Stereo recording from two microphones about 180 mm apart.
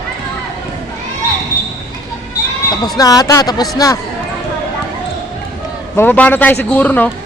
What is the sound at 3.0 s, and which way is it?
Speech, 20° left (ahead or behind).